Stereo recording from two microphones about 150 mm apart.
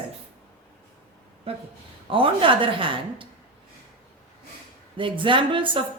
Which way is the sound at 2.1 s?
35° right (ahead or behind).